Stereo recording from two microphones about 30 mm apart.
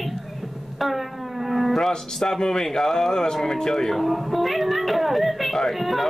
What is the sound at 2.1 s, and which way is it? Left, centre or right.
Speech, centre.